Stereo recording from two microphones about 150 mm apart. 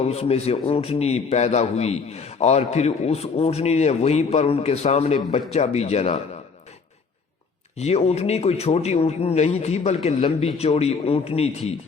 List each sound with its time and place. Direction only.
0.0 s a man's voice: 45° left (ahead or behind)
7.8 s a man's voice: 45° left (ahead or behind)